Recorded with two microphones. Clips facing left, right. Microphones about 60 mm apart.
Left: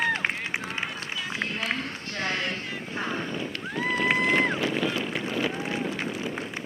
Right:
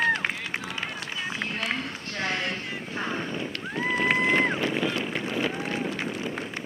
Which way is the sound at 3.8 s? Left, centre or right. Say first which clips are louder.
Even; centre.